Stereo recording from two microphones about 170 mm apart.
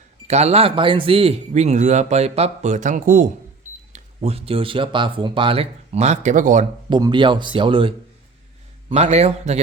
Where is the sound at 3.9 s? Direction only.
35° right (ahead or behind).